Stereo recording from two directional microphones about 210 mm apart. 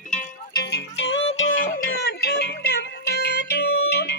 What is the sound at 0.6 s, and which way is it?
Music, 55° left (ahead or behind).